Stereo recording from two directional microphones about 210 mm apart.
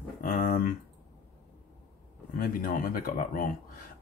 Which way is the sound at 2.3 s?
45° left (ahead or behind).